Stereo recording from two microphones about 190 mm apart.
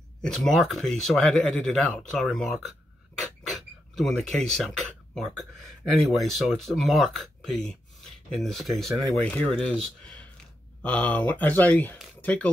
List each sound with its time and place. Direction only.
0.2 s speech: centre (ahead or behind)